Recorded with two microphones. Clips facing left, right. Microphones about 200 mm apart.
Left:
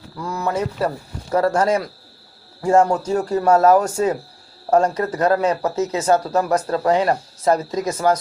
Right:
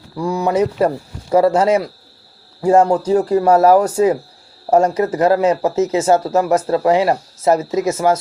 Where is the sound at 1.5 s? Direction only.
10° right (ahead or behind).